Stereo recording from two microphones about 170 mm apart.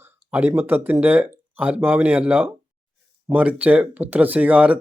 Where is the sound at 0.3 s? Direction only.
10° right (ahead or behind).